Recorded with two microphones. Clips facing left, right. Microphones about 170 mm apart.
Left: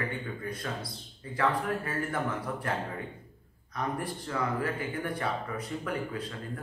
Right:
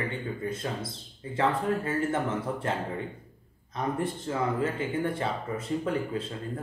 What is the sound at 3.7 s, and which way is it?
Speech, 25° right (ahead or behind).